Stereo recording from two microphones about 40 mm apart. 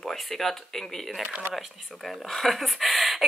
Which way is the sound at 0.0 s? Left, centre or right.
Centre.